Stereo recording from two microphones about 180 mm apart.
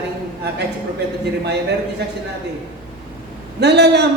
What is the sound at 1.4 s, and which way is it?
Speech, 70° right (ahead or behind).